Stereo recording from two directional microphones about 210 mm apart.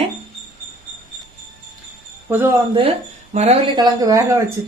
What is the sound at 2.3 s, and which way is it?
Speech, 10° right (ahead or behind).